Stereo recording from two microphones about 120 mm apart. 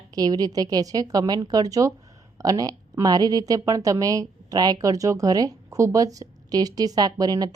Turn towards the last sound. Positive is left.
turn(degrees=-35)  # may be behind; listen again after turning